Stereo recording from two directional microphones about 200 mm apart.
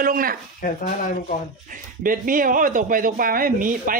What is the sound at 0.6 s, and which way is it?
Speech, 40° left (ahead or behind).